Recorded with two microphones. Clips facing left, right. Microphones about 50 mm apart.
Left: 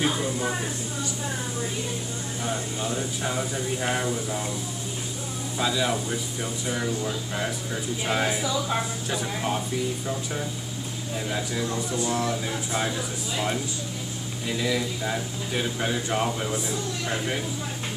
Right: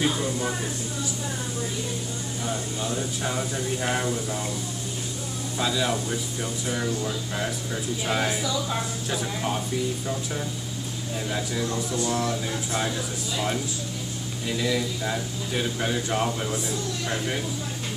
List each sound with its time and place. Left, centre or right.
0.0 s a sound: centre
2.4 s speech: centre
3.0 s speech: centre
5.6 s speech: centre
8.4 s speech: centre
9.1 s speech: centre
11.2 s speech: centre
14.5 s speech: centre